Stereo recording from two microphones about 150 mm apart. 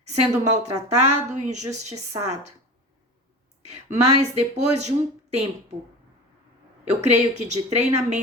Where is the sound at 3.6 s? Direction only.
45° right (ahead or behind).